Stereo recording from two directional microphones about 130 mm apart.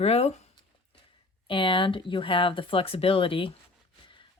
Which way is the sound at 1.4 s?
40° left (ahead or behind).